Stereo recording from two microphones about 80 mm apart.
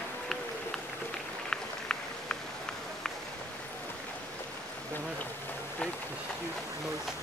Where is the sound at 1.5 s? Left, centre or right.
Centre.